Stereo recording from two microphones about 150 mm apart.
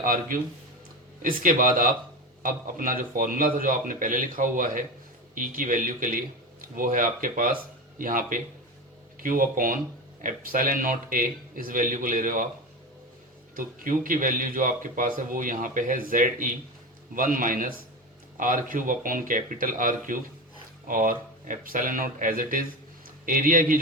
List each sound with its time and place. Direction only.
0.0 s speech: 65° right (ahead or behind)
13.6 s speech: 65° right (ahead or behind)